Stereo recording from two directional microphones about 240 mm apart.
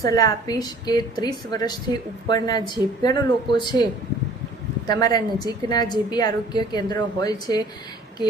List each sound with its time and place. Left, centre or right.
0.0 s a woman's voice: centre
4.9 s a woman's voice: centre